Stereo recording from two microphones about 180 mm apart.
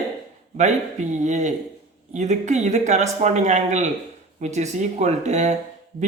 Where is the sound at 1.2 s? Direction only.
40° right (ahead or behind).